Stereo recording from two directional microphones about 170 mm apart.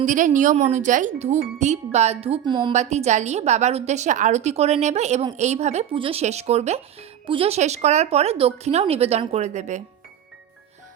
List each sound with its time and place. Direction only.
0.0 s speech: 45° right (ahead or behind); by 2.7 s 25° right (ahead or behind)
2.7 s speech: 40° right (ahead or behind)